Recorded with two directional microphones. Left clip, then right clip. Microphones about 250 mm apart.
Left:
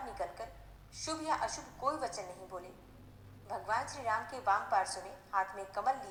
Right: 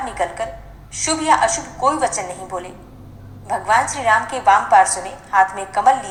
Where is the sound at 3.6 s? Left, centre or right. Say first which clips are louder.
Right 19 dB; right.